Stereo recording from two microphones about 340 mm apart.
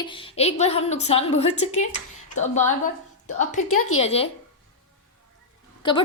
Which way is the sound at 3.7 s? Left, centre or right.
Left.